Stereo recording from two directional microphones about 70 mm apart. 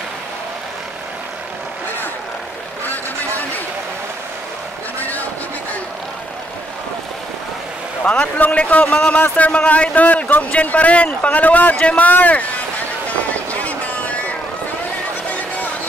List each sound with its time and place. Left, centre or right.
2.9 s vehicle: left
8.0 s a man's voice: centre
13.3 s vehicle: left